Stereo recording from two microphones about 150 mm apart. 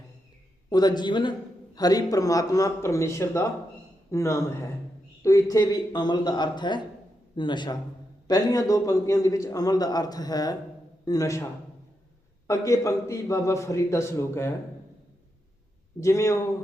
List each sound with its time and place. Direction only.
0.7 s a man's voice: 30° left (ahead or behind)
12.5 s a man's voice: 20° left (ahead or behind)
16.0 s a man's voice: 20° left (ahead or behind)